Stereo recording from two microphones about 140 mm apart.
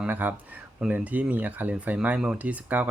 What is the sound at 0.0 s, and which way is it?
Speech, 15° right (ahead or behind).